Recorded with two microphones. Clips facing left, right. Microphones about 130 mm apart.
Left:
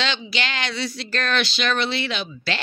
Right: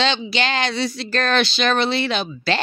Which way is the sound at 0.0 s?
30° right (ahead or behind).